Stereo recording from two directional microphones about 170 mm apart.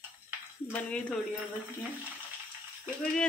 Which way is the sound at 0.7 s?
10° left (ahead or behind).